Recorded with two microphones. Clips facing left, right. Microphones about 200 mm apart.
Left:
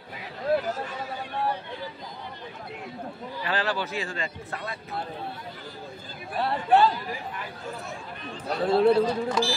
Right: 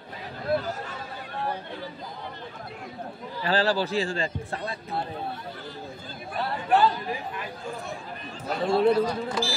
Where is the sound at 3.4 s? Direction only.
30° right (ahead or behind).